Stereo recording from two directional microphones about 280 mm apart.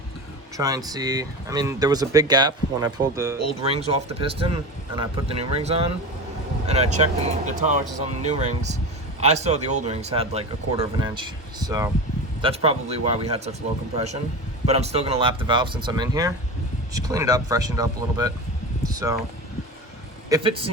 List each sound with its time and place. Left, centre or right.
0.5 s speech: centre
3.6 s speech: right
18.9 s a sound: centre
20.3 s speech: centre